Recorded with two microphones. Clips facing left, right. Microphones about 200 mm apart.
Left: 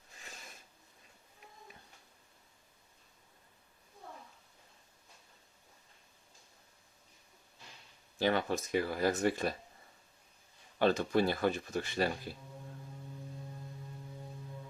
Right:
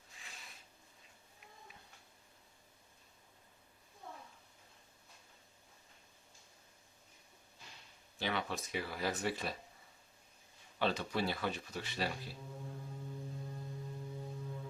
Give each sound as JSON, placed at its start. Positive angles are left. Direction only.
{"t": 0.2, "sound": "a sound", "side_deg": 45}
{"t": 8.2, "sound": "speech", "side_deg": 45}
{"t": 10.8, "sound": "speech", "side_deg": 50}